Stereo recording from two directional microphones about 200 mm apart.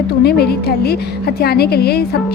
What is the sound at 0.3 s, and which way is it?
A woman's voice, 50° left (ahead or behind).